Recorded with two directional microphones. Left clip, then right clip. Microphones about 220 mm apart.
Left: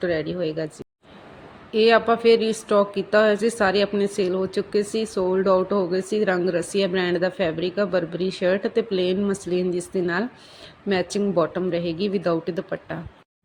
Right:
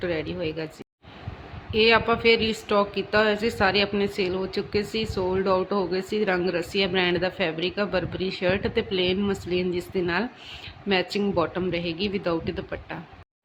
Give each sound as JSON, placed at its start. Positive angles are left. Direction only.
{"t": 0.0, "sound": "speech", "side_deg": 15}
{"t": 1.7, "sound": "speech", "side_deg": 15}